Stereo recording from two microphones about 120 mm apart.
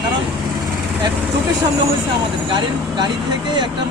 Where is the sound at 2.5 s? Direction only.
35° right (ahead or behind).